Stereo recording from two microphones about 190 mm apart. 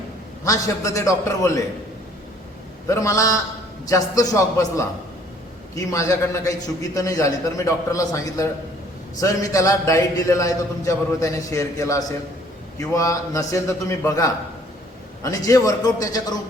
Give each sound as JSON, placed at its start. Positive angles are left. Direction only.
{"t": 0.4, "sound": "a man's voice", "side_deg": 15}
{"t": 2.8, "sound": "a man's voice", "side_deg": 15}
{"t": 15.4, "sound": "speech", "side_deg": 20}